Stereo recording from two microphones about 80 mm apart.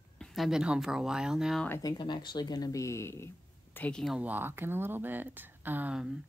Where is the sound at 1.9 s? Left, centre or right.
Left.